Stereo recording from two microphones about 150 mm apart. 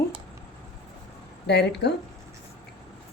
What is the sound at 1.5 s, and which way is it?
Speech, 90° left.